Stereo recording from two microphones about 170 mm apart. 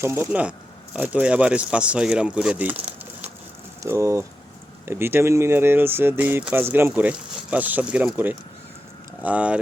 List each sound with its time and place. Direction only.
0.0 s speech: 15° right (ahead or behind)